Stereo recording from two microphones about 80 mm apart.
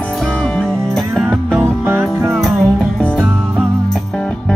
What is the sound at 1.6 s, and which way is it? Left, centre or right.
Music, right.